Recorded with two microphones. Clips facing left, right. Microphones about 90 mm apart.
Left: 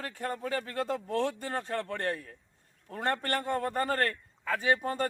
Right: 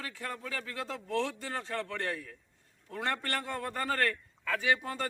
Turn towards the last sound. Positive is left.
turn(degrees=40)  # may be behind; listen again after turning